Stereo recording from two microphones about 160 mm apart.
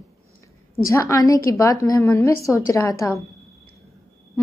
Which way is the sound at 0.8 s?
20° left (ahead or behind).